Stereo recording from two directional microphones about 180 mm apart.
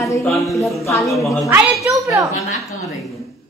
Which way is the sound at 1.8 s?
15° right (ahead or behind).